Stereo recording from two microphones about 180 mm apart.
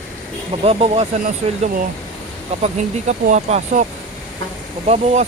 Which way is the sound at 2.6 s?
40° right (ahead or behind).